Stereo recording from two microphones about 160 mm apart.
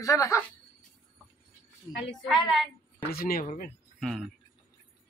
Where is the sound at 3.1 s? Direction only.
65° left (ahead or behind).